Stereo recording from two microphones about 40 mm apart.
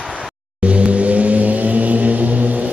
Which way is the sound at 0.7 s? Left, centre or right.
Right.